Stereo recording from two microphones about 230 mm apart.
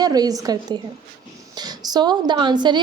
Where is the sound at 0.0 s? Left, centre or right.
Centre.